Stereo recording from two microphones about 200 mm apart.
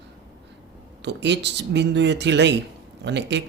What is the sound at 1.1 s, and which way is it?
Speech, 60° right (ahead or behind).